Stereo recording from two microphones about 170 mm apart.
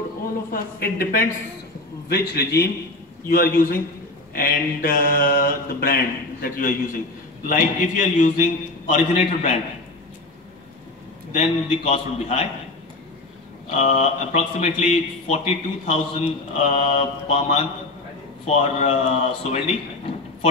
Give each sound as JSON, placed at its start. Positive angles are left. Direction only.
{"t": 0.5, "sound": "mantra", "side_deg": 60}
{"t": 2.0, "sound": "a man's voice", "side_deg": 70}
{"t": 3.3, "sound": "mantra", "side_deg": 60}
{"t": 7.4, "sound": "a man's voice", "side_deg": 50}
{"t": 11.3, "sound": "a man's voice", "side_deg": 35}
{"t": 13.7, "sound": "a man's voice", "side_deg": 40}